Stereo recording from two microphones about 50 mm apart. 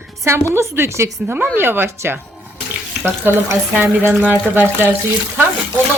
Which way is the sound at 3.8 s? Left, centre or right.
Right.